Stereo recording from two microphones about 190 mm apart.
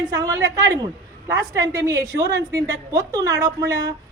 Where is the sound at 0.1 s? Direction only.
20° right (ahead or behind).